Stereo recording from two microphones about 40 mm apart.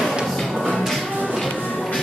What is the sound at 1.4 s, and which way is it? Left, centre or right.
Music, left.